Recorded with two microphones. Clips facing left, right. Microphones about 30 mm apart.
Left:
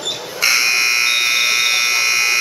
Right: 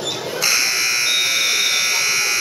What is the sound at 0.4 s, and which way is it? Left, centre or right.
Buzzer, centre.